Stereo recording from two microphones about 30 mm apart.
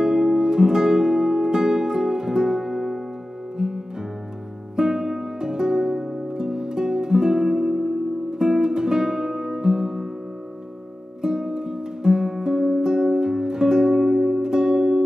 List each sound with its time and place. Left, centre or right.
0.0 s music: right
11.2 s music: right